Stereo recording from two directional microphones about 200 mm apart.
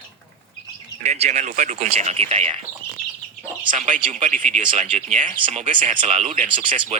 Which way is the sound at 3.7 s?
40° right (ahead or behind).